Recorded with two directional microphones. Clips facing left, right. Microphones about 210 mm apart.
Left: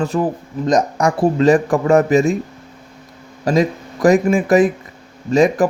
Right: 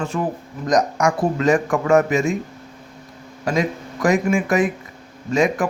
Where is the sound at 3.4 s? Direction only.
35° left (ahead or behind).